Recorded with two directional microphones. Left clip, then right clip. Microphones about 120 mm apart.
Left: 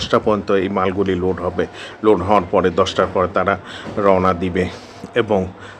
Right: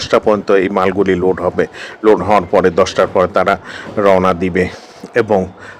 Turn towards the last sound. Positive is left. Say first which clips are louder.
# right 4 dB
turn(degrees=-30)  # may be behind; listen again after turning